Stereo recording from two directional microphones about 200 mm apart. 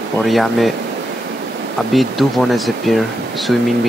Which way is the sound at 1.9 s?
Centre (ahead or behind).